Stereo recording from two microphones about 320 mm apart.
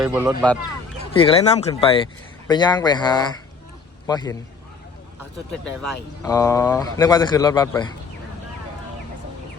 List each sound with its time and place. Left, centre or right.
0.0 s speech: centre
1.1 s a man's voice: centre
6.2 s a man's voice: centre